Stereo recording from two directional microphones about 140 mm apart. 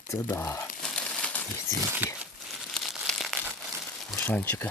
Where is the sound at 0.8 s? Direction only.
5° left (ahead or behind).